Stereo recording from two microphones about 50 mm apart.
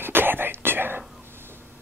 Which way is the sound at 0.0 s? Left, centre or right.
Right.